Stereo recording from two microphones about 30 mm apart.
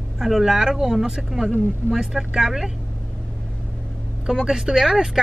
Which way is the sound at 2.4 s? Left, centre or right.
Centre.